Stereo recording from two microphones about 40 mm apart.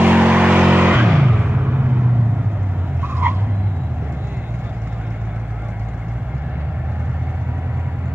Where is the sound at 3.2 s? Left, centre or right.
Right.